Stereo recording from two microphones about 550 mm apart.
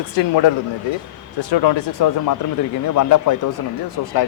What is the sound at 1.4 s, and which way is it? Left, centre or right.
A man's voice, left.